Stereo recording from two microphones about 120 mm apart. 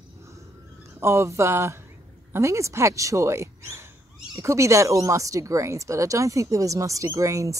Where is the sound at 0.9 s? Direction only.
25° right (ahead or behind).